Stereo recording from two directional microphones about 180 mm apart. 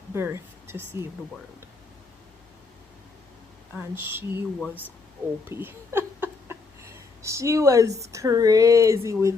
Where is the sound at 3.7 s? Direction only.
10° right (ahead or behind).